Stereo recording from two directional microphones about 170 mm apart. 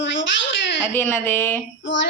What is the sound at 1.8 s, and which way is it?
Speech, 90° left.